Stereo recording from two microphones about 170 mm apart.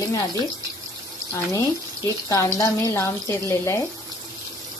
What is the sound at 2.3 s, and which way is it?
Speech, 20° left (ahead or behind).